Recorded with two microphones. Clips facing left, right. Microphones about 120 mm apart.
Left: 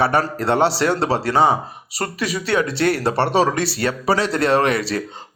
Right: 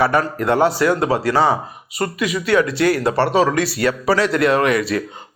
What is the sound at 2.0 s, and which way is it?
Speech, 35° left (ahead or behind).